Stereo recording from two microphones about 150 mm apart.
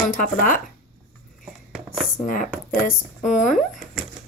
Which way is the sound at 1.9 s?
Centre (ahead or behind).